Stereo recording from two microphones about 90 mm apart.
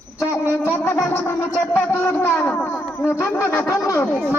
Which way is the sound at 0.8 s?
25° left (ahead or behind).